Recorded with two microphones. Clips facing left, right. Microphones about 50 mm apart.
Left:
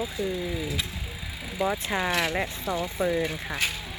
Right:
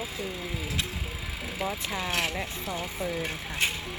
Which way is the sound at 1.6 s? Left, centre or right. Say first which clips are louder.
Left 6 dB; left.